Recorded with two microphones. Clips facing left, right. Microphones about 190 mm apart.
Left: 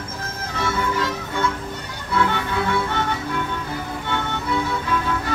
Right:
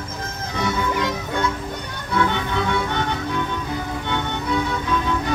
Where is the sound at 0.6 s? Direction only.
15° right (ahead or behind).